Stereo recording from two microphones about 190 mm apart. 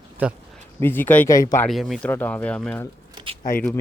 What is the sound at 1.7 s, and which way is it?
Speech, centre (ahead or behind).